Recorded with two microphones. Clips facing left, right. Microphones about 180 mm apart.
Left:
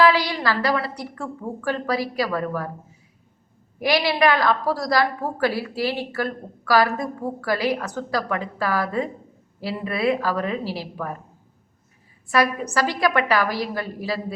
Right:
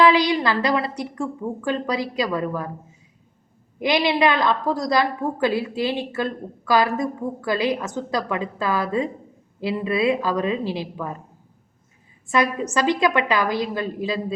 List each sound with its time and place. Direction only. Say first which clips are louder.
0.0 s a woman's voice: right 2 dB; 20° right (ahead or behind)
3.8 s a woman's voice: right 1 dB; 20° right (ahead or behind)
12.7 s a woman's voice: right 2 dB; 20° right (ahead or behind)